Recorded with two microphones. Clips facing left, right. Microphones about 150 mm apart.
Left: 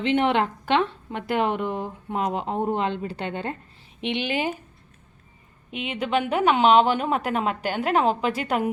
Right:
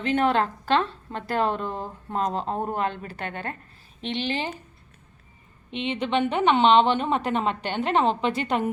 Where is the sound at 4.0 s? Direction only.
15° left (ahead or behind).